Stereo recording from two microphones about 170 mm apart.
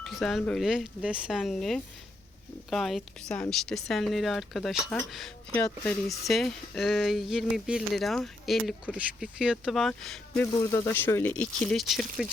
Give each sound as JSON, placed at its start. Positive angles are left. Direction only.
{"t": 0.0, "sound": "speech", "side_deg": 0}
{"t": 10.7, "sound": "speech", "side_deg": 20}